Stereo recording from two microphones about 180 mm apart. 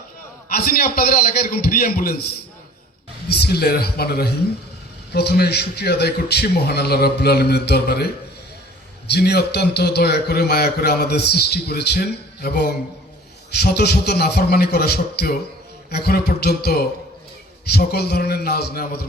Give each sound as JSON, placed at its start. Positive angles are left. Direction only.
{"t": 0.5, "sound": "a man's voice", "side_deg": 55}
{"t": 3.2, "sound": "a man's voice", "side_deg": 65}